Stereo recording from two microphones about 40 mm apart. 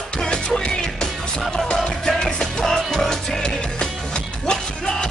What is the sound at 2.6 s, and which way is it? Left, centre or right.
Music, centre.